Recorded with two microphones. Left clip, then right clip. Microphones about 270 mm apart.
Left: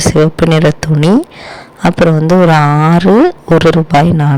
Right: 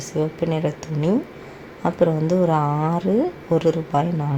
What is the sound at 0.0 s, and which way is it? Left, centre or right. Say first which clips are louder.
Speech: left 14 dB; left.